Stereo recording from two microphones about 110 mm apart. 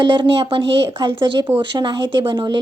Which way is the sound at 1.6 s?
45° right (ahead or behind).